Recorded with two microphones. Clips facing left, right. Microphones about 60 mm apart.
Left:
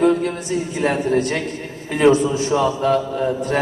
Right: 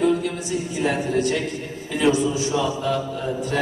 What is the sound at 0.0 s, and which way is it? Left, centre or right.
A man's voice, left.